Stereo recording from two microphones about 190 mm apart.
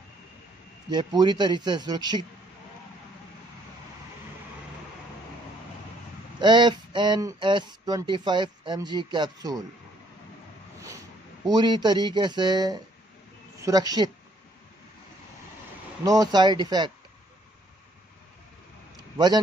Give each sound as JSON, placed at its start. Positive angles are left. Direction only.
{"t": 0.8, "sound": "speech", "side_deg": -20}
{"t": 6.4, "sound": "speech", "side_deg": -25}
{"t": 11.4, "sound": "speech", "side_deg": -20}
{"t": 16.0, "sound": "speech", "side_deg": -20}
{"t": 19.1, "sound": "a man's voice", "side_deg": -20}